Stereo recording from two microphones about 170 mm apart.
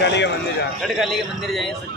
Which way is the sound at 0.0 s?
90° left.